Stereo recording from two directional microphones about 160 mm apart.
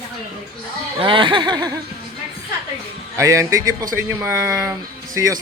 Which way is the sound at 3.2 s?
20° right (ahead or behind).